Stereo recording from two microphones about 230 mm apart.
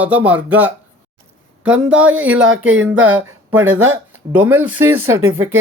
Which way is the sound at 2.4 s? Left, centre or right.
Right.